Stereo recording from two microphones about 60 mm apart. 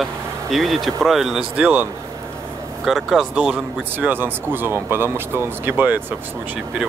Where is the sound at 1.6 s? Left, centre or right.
Right.